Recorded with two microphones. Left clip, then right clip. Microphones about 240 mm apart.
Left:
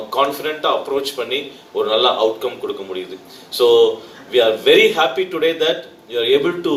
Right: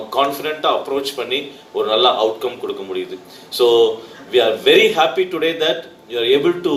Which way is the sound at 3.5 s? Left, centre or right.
Right.